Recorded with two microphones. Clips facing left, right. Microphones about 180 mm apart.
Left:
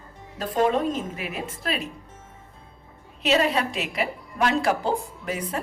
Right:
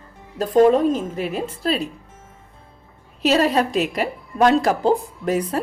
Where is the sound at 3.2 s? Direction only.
40° right (ahead or behind).